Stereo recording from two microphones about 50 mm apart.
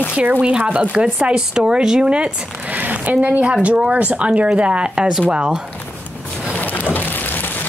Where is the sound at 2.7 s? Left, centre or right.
Right.